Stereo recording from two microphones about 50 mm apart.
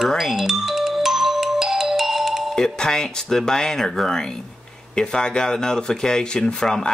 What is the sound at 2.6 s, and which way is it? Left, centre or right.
Speech, centre.